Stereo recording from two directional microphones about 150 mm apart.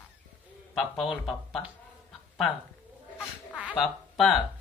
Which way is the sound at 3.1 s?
5° right (ahead or behind).